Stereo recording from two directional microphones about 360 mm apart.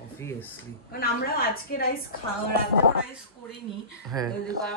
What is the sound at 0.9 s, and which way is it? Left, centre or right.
Speech, left.